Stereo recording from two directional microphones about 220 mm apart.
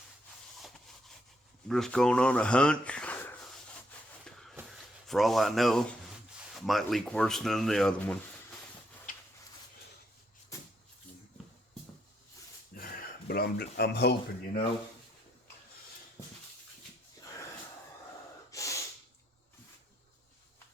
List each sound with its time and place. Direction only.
1.6 s speech: centre (ahead or behind)
4.2 s a sound: centre (ahead or behind)
5.0 s speech: centre (ahead or behind)
12.7 s speech: 45° left (ahead or behind)
18.5 s snort: 15° left (ahead or behind)